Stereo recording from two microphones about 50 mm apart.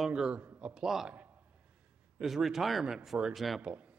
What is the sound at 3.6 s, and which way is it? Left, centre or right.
Speech, right.